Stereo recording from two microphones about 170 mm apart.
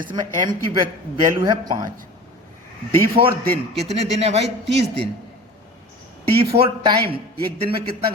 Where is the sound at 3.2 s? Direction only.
35° right (ahead or behind).